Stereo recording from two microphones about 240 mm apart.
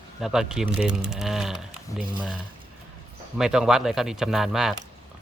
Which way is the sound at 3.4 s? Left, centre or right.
Centre.